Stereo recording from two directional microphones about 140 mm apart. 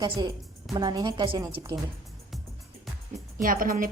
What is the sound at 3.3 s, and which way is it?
Speech, 80° right.